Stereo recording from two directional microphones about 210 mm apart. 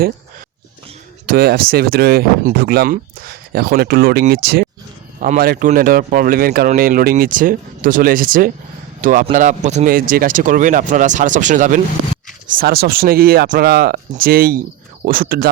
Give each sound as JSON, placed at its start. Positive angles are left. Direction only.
{"t": 1.3, "sound": "speech", "side_deg": -45}